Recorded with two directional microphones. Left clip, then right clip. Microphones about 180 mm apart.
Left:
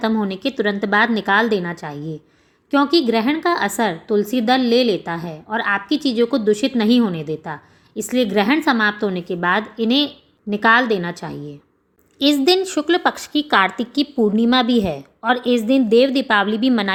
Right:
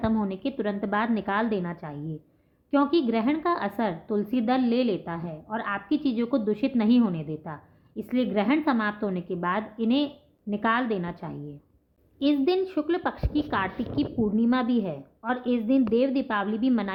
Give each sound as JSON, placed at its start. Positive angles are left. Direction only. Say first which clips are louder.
{"t": 0.0, "sound": "a woman's voice", "louder": "left 7 dB", "side_deg": 25}